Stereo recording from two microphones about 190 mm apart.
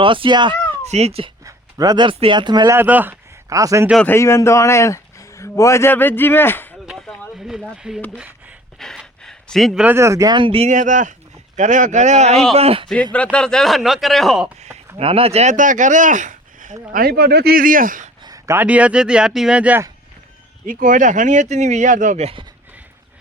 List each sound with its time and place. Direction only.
0.0 s speech: 25° right (ahead or behind)
0.9 s speech: 35° right (ahead or behind)
1.5 s speech: 20° right (ahead or behind)
2.7 s speech: 10° right (ahead or behind)
4.0 s speech: 15° left (ahead or behind)
6.8 s a sound: centre (ahead or behind)
7.3 s speech: centre (ahead or behind); by 10.7 s 25° right (ahead or behind)
10.7 s speech: 40° right (ahead or behind)
13.1 s speech: 5° left (ahead or behind)
14.9 s speech: 30° right (ahead or behind)
16.9 s speech: 55° right (ahead or behind)
18.3 s speech: 15° right (ahead or behind)
20.7 s speech: 45° right (ahead or behind)